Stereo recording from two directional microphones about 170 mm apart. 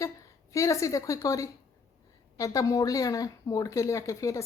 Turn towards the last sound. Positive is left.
turn(degrees=20)  # may be behind; listen again after turning